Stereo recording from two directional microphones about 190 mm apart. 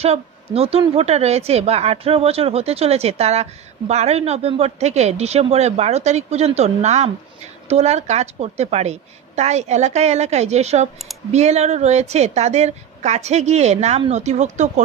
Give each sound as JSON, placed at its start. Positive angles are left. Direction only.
{"t": 0.0, "sound": "a woman's voice", "side_deg": -30}